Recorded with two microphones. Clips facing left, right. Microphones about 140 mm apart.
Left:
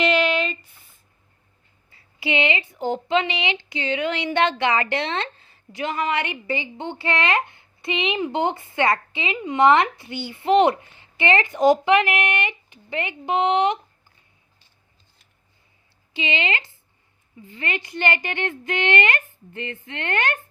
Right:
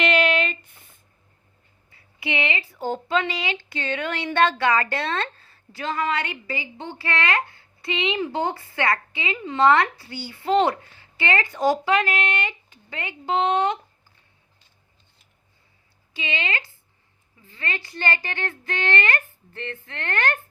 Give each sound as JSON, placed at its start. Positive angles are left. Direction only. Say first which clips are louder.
{"t": 0.3, "sound": "a sound", "louder": "even", "side_deg": 0}
{"t": 1.9, "sound": "speech", "louder": "left 4 dB", "side_deg": 25}
{"t": 16.1, "sound": "speech", "louder": "left 4 dB", "side_deg": 25}